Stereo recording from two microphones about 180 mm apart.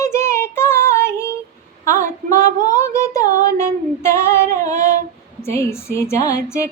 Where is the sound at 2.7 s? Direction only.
15° left (ahead or behind).